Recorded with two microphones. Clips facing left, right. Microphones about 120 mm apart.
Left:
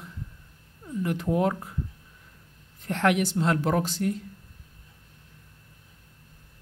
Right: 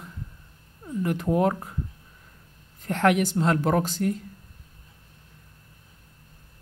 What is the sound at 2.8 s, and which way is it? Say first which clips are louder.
A woman's voice: right 2 dB; 45° right (ahead or behind).